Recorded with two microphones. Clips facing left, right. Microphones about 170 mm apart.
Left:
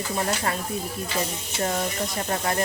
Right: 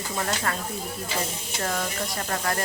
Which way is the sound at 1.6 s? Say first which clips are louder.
Left 3 dB; 25° left (ahead or behind).